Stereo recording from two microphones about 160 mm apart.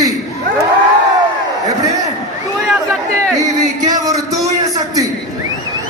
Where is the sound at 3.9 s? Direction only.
20° right (ahead or behind).